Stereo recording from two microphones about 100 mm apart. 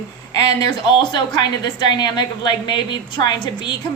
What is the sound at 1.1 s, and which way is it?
A woman's voice, 45° left (ahead or behind).